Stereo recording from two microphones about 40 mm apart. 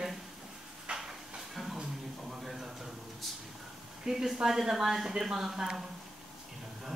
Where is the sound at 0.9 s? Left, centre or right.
Right.